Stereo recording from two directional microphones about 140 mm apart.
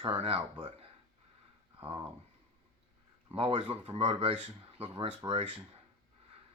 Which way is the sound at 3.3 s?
40° right (ahead or behind).